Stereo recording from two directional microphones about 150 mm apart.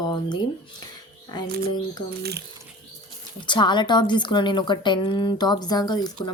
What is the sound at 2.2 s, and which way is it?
Speech, 90° right.